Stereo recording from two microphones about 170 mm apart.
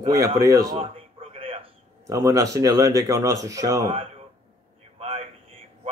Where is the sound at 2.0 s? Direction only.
20° right (ahead or behind).